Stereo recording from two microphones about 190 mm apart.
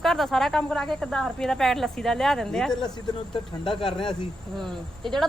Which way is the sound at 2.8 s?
25° left (ahead or behind).